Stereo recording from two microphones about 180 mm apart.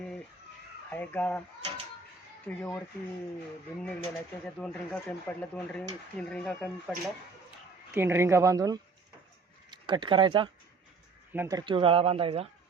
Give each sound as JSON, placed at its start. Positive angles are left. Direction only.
{"t": 0.9, "sound": "speech", "side_deg": 10}
{"t": 2.6, "sound": "speech", "side_deg": 10}
{"t": 4.4, "sound": "speech", "side_deg": 5}
{"t": 7.9, "sound": "speech", "side_deg": -15}